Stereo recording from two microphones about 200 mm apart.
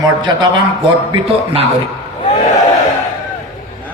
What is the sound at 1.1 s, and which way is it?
Speech, 30° right (ahead or behind).